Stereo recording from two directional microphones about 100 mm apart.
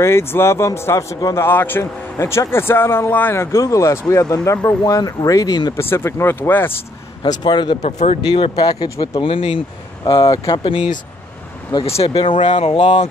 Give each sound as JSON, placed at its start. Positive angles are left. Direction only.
{"t": 0.0, "sound": "speech", "side_deg": 25}
{"t": 5.8, "sound": "speech", "side_deg": 25}
{"t": 7.4, "sound": "speech", "side_deg": 50}
{"t": 7.7, "sound": "speech", "side_deg": 85}
{"t": 8.4, "sound": "speech", "side_deg": 45}
{"t": 9.2, "sound": "speech", "side_deg": 65}
{"t": 10.3, "sound": "speech", "side_deg": 40}
{"t": 10.6, "sound": "speech", "side_deg": 60}
{"t": 11.7, "sound": "speech", "side_deg": 45}
{"t": 12.2, "sound": "speech", "side_deg": 60}